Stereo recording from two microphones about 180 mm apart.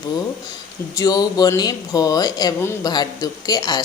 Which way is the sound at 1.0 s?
20° left (ahead or behind).